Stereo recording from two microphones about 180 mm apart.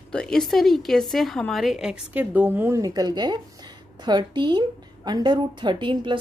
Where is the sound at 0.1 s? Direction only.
5° left (ahead or behind).